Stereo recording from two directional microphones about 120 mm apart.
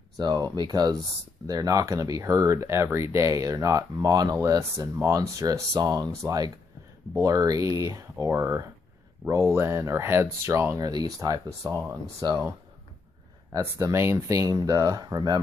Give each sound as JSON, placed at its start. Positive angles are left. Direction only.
{"t": 0.2, "sound": "speech", "side_deg": -35}
{"t": 13.5, "sound": "speech", "side_deg": -25}